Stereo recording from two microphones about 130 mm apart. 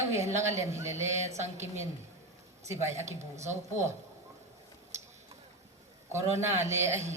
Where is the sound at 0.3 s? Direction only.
20° right (ahead or behind).